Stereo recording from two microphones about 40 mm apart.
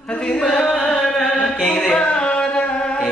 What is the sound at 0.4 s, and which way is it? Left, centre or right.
Chant, centre.